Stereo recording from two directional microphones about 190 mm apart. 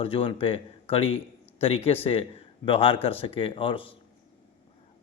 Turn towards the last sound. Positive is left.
turn(degrees=30)  # may be behind; listen again after turning